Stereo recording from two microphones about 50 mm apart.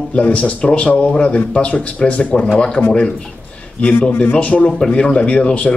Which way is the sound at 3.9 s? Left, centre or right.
Left.